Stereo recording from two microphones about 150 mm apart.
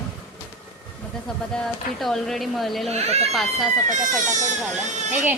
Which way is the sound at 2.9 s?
45° right (ahead or behind).